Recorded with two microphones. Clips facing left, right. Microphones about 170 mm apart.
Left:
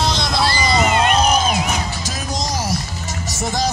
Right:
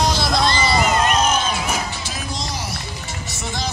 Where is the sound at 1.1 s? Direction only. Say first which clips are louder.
Left 3 dB; 35° left (ahead or behind).